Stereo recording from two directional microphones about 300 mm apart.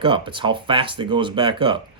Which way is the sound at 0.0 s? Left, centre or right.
Centre.